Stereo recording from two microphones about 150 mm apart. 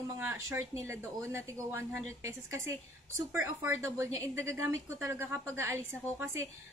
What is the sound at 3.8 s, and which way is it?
A woman's voice, 20° right (ahead or behind).